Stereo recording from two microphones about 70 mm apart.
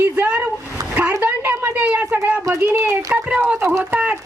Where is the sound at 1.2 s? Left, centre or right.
Right.